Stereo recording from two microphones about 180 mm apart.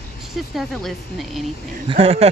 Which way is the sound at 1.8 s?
30° right (ahead or behind).